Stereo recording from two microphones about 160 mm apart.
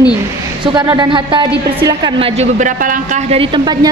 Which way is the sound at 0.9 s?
30° right (ahead or behind).